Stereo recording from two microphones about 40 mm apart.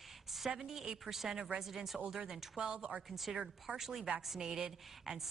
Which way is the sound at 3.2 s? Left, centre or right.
Centre.